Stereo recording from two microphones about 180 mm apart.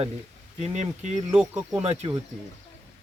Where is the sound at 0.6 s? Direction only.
40° right (ahead or behind).